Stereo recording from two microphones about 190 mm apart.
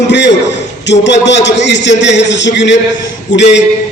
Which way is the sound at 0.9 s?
70° left (ahead or behind).